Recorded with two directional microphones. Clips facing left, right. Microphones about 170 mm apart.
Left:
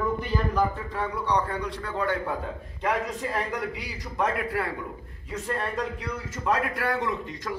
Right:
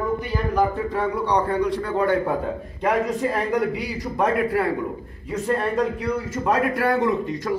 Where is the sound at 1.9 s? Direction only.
45° right (ahead or behind).